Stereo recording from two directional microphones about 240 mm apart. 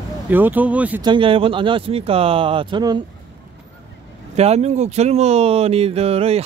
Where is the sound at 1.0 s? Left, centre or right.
Right.